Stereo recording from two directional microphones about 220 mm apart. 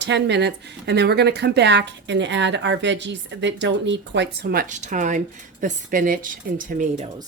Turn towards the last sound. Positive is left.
turn(degrees=-35)  # may be behind; listen again after turning